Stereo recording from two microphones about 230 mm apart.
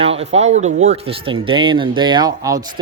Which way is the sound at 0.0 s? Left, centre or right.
Right.